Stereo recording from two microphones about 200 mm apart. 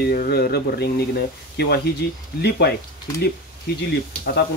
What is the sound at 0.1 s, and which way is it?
Speech, 50° left (ahead or behind).